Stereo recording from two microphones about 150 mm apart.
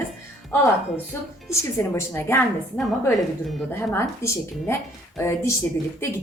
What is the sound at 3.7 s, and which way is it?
A woman's voice, 15° left (ahead or behind).